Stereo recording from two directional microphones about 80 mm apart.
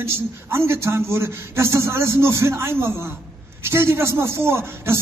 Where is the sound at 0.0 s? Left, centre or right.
Right.